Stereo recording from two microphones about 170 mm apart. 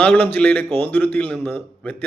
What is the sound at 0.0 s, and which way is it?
Speech, 10° left (ahead or behind).